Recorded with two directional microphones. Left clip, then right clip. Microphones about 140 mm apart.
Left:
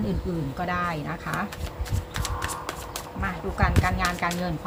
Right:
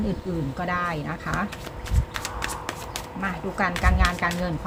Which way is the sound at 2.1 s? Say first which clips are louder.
Right 1 dB; 10° right (ahead or behind).